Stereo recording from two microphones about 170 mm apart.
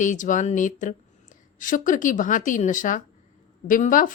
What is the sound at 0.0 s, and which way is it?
Speech, 50° left (ahead or behind).